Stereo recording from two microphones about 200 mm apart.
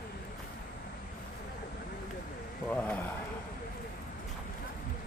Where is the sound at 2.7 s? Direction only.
10° left (ahead or behind).